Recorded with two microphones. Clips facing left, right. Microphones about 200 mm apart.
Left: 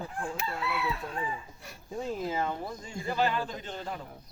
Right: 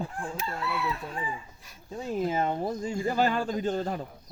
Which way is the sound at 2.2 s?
25° right (ahead or behind).